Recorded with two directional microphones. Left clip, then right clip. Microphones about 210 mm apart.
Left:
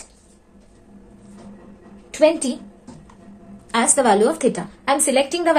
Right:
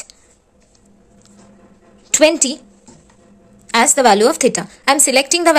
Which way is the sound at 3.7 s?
45° right (ahead or behind).